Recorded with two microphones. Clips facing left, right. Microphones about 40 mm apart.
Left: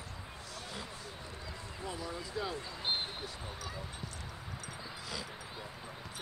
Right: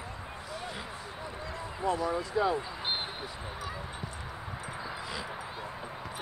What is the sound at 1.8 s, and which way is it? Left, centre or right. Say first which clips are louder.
Speech: right 12 dB; centre.